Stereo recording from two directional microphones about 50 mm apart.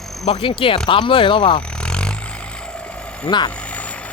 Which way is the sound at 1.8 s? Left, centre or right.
Centre.